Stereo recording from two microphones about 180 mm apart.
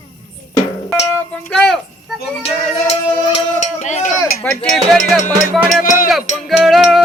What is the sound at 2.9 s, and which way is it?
Music, 40° left (ahead or behind).